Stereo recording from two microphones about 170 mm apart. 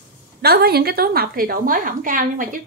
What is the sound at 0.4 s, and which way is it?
A woman's voice, 70° right (ahead or behind).